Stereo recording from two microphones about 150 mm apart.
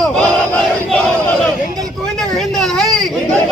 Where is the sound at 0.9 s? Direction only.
5° left (ahead or behind).